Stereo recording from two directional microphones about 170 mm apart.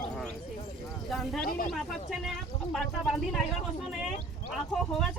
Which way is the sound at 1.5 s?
55° left (ahead or behind).